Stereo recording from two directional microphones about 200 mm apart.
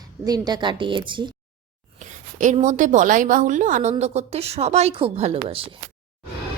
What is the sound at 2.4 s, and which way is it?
Speech, 40° right (ahead or behind).